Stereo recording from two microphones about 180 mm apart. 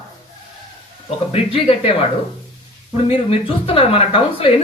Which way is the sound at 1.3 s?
35° left (ahead or behind).